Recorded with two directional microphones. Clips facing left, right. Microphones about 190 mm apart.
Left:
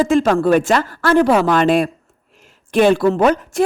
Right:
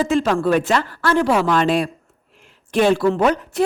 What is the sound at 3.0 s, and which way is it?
Speech, 45° left (ahead or behind).